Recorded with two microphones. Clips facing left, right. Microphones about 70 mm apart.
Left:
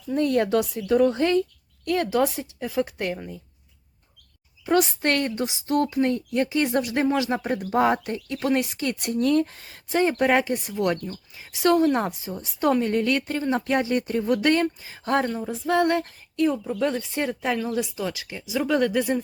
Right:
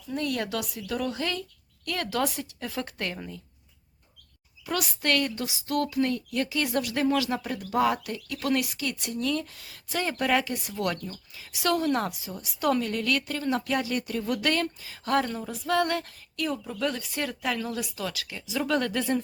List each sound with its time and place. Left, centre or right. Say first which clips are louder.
0.1 s speech: left 8 dB; left
4.6 s speech: left 8 dB; left